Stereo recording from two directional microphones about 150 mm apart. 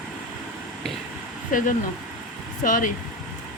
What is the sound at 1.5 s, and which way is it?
Speech, 65° left (ahead or behind).